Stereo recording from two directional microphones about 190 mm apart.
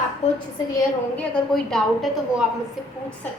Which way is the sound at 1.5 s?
Centre (ahead or behind).